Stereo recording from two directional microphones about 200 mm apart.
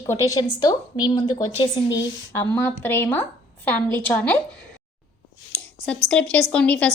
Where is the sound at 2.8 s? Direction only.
10° left (ahead or behind).